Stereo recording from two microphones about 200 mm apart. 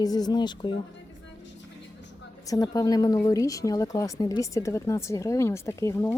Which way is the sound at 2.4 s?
20° left (ahead or behind).